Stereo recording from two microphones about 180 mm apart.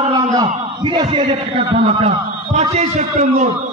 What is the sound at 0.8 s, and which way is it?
A man's voice, 25° right (ahead or behind).